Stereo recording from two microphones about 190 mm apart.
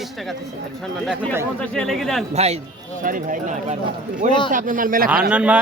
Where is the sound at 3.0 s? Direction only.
45° right (ahead or behind).